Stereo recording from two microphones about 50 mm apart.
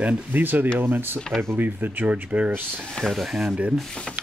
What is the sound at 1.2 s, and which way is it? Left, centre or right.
Speech, centre.